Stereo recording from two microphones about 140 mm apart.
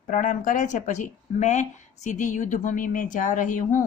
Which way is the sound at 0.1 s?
70° left (ahead or behind).